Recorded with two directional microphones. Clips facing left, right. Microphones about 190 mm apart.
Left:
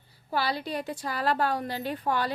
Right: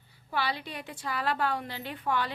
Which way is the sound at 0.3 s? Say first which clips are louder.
Left 4 dB; 40° left (ahead or behind).